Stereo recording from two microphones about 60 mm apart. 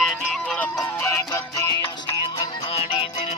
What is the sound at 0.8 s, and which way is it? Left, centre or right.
Music, left.